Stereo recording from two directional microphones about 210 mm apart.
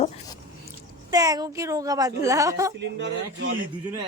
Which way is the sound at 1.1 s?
20° right (ahead or behind).